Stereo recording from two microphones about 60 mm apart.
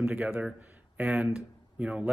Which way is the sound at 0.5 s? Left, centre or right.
Right.